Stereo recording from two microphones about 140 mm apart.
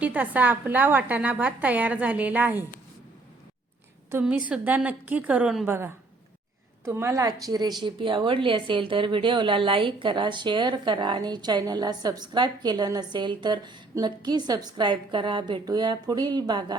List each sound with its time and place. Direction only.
0.0 s a woman's voice: 10° right (ahead or behind)
4.1 s a woman's voice: 10° right (ahead or behind); by 16.7 s 30° right (ahead or behind)